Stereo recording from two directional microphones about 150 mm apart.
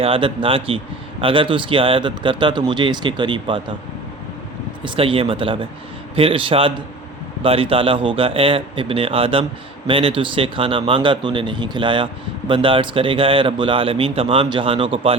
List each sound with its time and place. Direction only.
0.0 s speech: 35° right (ahead or behind)
4.8 s speech: 35° right (ahead or behind)